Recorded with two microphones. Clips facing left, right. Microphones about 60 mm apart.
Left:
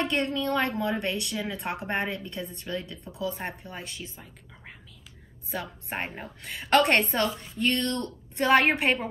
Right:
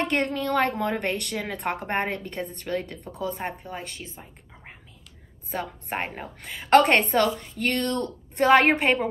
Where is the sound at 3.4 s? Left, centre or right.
Right.